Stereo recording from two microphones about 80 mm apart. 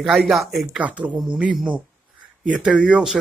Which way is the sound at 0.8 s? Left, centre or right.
Centre.